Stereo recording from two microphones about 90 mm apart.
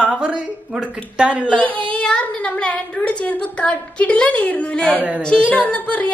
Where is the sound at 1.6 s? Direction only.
15° left (ahead or behind).